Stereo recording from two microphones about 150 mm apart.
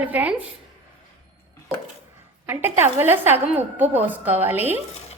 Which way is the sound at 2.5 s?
15° right (ahead or behind).